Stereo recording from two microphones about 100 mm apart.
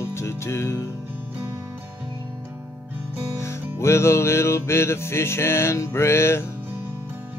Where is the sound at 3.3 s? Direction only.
30° left (ahead or behind).